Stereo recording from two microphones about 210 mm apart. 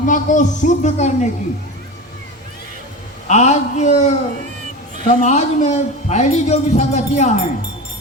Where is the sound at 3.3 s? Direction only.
35° left (ahead or behind).